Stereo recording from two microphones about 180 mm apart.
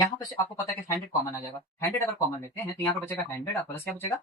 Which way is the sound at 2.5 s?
15° left (ahead or behind).